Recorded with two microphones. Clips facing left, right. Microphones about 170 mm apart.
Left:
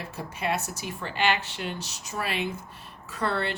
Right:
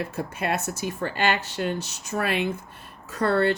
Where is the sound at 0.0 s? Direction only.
50° right (ahead or behind).